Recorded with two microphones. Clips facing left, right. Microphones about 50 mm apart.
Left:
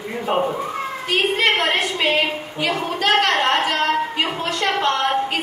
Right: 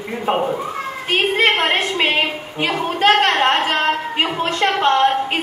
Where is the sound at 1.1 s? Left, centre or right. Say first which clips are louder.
Right 2 dB; right.